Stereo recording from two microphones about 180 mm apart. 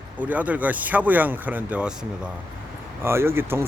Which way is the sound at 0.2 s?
10° right (ahead or behind).